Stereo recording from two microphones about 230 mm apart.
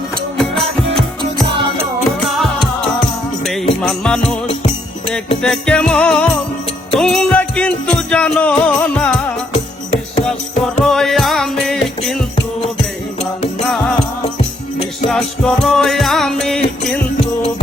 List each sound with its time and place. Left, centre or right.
0.3 s music: centre
1.2 s music: right
2.3 s music: centre
5.4 s music: centre
10.8 s music: centre
13.7 s music: centre
15.1 s music: centre